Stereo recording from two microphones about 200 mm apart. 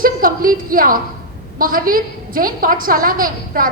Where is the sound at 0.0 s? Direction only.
45° right (ahead or behind).